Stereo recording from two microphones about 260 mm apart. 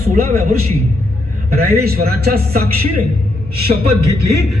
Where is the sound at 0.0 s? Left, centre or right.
Right.